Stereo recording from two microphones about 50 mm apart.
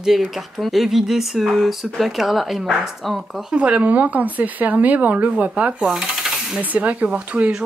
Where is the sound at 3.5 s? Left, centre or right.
Right.